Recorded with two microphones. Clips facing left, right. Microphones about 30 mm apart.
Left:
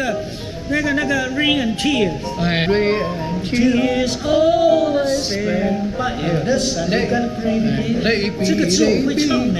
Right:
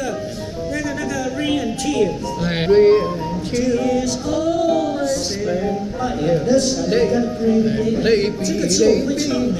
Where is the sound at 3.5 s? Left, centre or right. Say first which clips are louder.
Left 2 dB; left.